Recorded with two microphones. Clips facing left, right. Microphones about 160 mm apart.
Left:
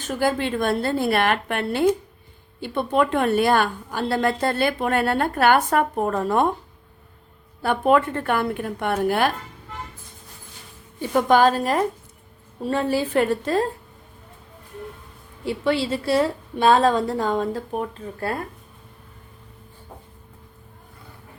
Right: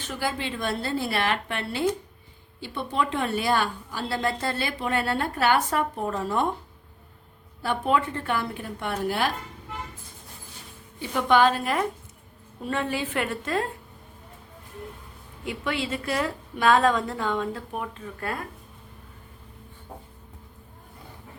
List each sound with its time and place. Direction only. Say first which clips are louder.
0.1 s a woman's voice: left 8 dB; 50° left (ahead or behind)
7.6 s a woman's voice: left 6 dB; 55° left (ahead or behind)
11.1 s a woman's voice: left 4 dB; 40° left (ahead or behind)
15.4 s a woman's voice: left 7 dB; 30° left (ahead or behind)